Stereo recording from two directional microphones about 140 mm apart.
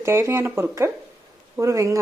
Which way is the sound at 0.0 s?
20° right (ahead or behind).